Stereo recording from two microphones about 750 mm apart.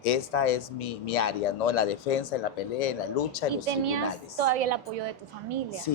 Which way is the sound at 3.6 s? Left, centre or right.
Right.